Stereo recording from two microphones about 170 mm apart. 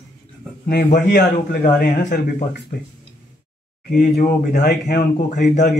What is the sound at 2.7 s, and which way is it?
Speech, 65° left (ahead or behind).